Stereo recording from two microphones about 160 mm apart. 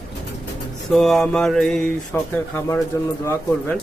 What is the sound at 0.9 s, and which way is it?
Speech, 5° left (ahead or behind).